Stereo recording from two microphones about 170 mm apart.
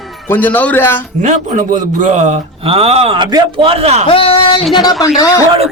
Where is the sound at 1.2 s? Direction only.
45° right (ahead or behind).